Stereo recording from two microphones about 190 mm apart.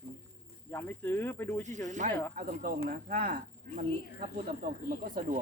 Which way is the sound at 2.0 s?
45° right (ahead or behind).